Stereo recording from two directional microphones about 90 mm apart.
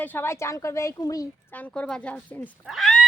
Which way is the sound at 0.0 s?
20° left (ahead or behind).